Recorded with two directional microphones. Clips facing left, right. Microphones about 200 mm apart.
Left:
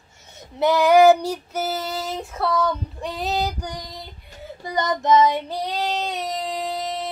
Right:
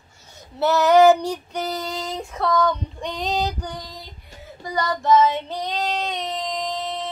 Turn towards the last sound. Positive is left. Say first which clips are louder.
# left 1 dB
turn(degrees=10)  # may be behind; listen again after turning